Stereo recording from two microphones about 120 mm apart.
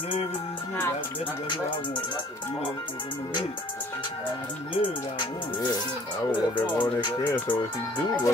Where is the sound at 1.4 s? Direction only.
40° left (ahead or behind).